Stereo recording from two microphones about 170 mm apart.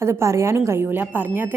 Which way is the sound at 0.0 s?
15° right (ahead or behind).